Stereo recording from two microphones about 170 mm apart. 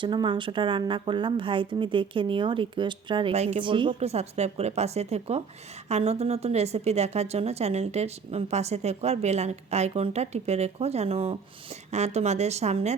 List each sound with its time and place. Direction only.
0.0 s speech: 30° right (ahead or behind)
3.6 s a woman's voice: 30° right (ahead or behind)